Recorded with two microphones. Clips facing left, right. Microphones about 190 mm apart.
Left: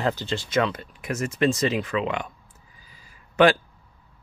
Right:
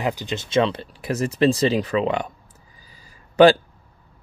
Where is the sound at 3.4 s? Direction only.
35° right (ahead or behind).